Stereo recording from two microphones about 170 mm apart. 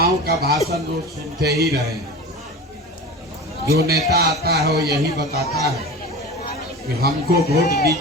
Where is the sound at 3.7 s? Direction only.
65° right (ahead or behind).